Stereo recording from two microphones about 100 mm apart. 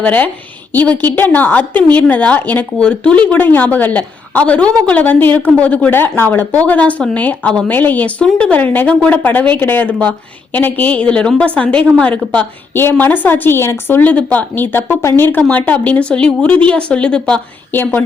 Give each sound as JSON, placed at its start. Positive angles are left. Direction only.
{"t": 0.0, "sound": "a woman's voice", "side_deg": 15}